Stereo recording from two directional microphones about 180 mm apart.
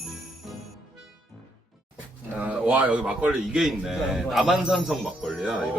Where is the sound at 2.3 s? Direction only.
5° right (ahead or behind).